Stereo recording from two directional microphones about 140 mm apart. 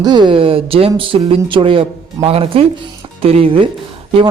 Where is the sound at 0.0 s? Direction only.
30° right (ahead or behind).